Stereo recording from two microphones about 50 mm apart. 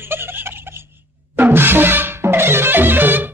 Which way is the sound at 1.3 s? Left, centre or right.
Right.